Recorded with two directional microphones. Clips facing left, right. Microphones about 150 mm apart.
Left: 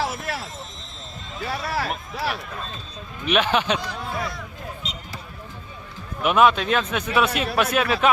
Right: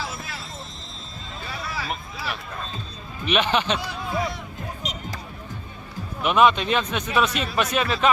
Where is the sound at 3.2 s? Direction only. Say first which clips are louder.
Left 1 dB; 5° left (ahead or behind).